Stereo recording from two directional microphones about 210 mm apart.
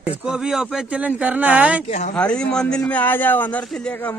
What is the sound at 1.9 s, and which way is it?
Speech, 35° left (ahead or behind).